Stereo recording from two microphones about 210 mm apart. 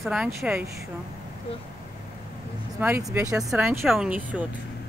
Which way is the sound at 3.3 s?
5° right (ahead or behind).